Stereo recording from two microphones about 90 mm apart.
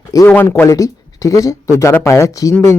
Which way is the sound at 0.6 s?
35° left (ahead or behind).